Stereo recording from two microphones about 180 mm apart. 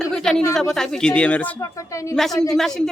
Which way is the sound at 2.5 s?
Centre (ahead or behind).